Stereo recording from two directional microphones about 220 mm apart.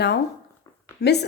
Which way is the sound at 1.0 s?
50° left (ahead or behind).